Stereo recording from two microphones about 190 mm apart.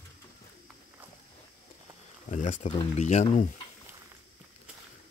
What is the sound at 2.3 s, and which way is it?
Speech, 40° left (ahead or behind).